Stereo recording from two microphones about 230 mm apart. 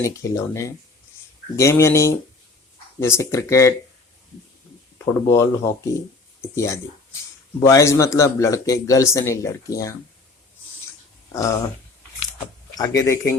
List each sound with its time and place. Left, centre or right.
0.0 s speech: centre
5.3 s speech: centre
11.3 s speech: centre
12.7 s speech: centre